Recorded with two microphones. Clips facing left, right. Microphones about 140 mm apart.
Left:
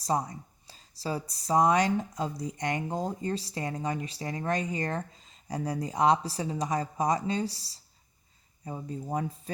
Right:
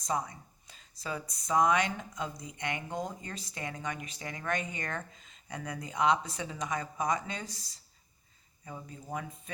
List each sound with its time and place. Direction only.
0.0 s speech: 35° left (ahead or behind)